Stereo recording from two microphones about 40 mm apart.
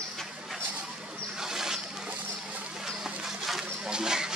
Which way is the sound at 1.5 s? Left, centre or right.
Centre.